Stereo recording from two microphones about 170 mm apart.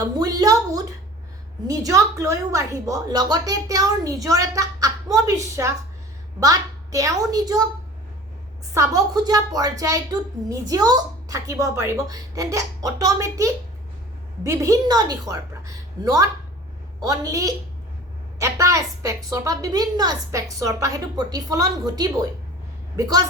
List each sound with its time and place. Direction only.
0.2 s a woman's voice: 20° right (ahead or behind)
8.7 s speech: 20° right (ahead or behind)